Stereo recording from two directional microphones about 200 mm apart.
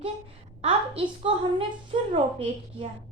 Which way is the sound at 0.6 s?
25° right (ahead or behind).